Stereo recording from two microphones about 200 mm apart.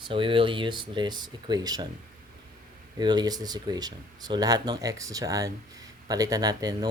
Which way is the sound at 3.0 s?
20° right (ahead or behind).